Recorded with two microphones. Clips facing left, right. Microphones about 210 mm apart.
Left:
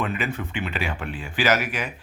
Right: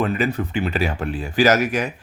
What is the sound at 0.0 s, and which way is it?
Speech, 40° right (ahead or behind).